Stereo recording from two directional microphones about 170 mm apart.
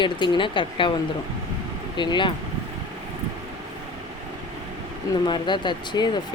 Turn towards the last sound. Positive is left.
turn(degrees=25)  # may be behind; listen again after turning